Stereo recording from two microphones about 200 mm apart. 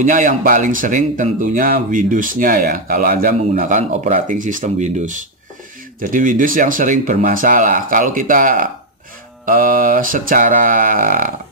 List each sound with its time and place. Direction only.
0.0 s speech: 40° right (ahead or behind)